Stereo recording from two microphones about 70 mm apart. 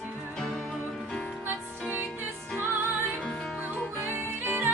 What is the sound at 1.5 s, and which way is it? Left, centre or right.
Music, right.